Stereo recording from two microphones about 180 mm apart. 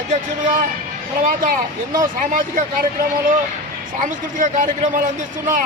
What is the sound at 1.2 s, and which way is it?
Speech, 50° right (ahead or behind).